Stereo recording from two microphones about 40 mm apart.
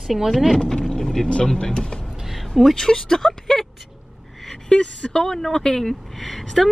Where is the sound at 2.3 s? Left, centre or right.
Centre.